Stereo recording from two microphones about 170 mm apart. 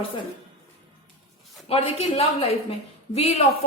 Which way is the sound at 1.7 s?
35° left (ahead or behind).